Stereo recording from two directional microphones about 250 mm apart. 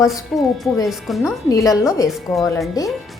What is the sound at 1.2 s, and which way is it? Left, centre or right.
Speech, centre.